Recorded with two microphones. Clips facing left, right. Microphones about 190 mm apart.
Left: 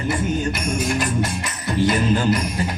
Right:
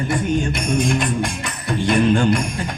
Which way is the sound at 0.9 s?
5° left (ahead or behind).